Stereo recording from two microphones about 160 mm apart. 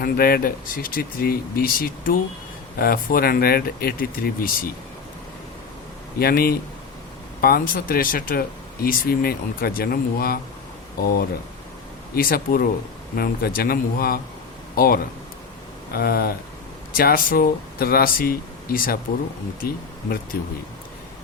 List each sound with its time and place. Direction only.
0.0 s speech: 70° left (ahead or behind)
6.1 s speech: 70° left (ahead or behind)